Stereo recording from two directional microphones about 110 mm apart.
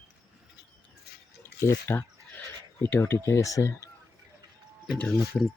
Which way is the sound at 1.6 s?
20° left (ahead or behind).